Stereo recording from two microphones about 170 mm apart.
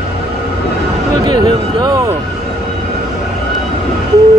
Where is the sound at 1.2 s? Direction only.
25° right (ahead or behind).